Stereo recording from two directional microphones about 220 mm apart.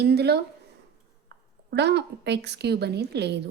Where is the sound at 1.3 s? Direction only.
50° right (ahead or behind).